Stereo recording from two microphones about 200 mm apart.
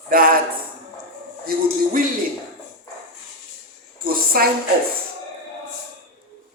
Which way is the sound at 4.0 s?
50° right (ahead or behind).